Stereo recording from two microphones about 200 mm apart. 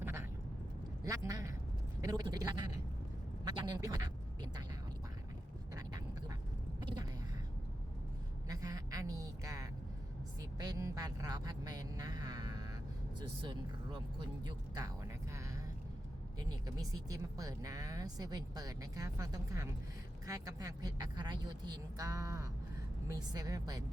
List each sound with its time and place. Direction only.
0.0 s vehicle: 15° right (ahead or behind)
1.0 s speech: 15° right (ahead or behind)
5.7 s duck: 20° right (ahead or behind)
8.4 s a sound: 15° right (ahead or behind)
13.1 s speech: 25° right (ahead or behind)
14.4 s music: 20° right (ahead or behind)
16.6 s speech: 15° right (ahead or behind)